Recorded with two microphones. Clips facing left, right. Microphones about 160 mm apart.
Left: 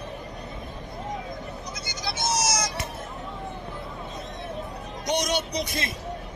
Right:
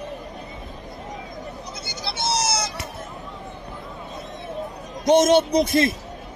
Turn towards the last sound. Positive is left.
turn(degrees=-50)  # may be behind; listen again after turning